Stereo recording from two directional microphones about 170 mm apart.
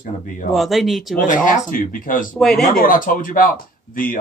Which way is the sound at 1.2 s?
50° left (ahead or behind).